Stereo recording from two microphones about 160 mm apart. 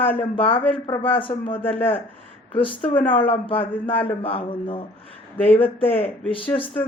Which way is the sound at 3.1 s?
35° left (ahead or behind).